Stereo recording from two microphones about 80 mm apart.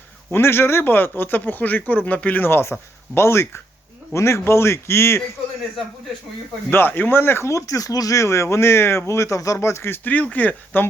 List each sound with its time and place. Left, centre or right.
0.3 s speech: left
6.7 s speech: left